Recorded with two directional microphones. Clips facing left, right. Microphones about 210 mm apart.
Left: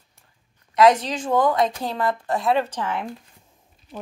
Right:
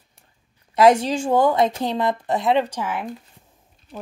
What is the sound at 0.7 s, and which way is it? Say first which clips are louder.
A woman's voice: right 2 dB; 30° right (ahead or behind).